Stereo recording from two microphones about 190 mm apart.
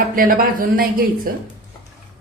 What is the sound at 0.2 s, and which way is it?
A woman's voice, 45° right (ahead or behind).